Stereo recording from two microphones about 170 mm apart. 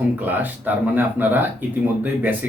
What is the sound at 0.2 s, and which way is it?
Speech, 10° right (ahead or behind).